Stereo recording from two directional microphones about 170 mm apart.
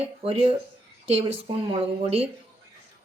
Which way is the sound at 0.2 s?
35° right (ahead or behind).